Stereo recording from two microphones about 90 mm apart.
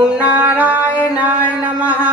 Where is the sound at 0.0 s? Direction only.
15° right (ahead or behind).